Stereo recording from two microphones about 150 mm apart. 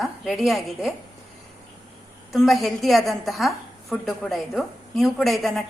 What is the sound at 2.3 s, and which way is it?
A woman's voice, centre (ahead or behind).